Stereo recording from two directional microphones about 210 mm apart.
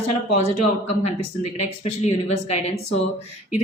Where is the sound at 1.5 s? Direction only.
30° left (ahead or behind).